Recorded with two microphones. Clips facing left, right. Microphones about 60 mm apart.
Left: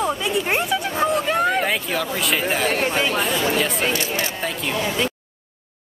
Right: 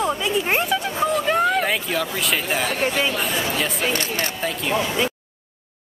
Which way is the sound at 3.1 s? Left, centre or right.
Left.